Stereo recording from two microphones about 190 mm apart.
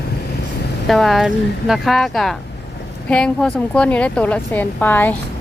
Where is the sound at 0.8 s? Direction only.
Centre (ahead or behind).